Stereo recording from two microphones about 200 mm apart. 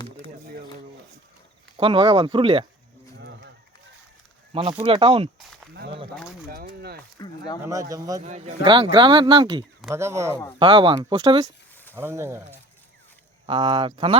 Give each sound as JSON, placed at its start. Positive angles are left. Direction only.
{"t": 1.8, "sound": "speech", "side_deg": -25}
{"t": 3.2, "sound": "run", "side_deg": -65}
{"t": 4.8, "sound": "speech", "side_deg": -25}
{"t": 6.5, "sound": "speech", "side_deg": -50}
{"t": 7.2, "sound": "speech", "side_deg": 20}
{"t": 7.6, "sound": "speech", "side_deg": -15}
{"t": 8.2, "sound": "speech", "side_deg": -35}
{"t": 10.6, "sound": "speech", "side_deg": -25}
{"t": 13.5, "sound": "speech", "side_deg": -25}